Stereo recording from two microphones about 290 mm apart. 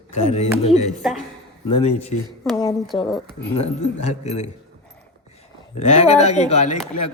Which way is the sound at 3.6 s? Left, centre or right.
Left.